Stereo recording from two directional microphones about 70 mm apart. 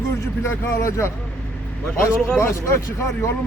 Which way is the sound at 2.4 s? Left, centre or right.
Left.